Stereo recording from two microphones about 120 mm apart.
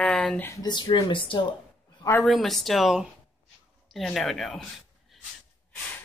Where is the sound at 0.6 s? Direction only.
40° left (ahead or behind).